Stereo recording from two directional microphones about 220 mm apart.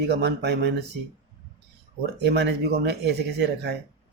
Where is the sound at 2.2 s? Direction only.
50° right (ahead or behind).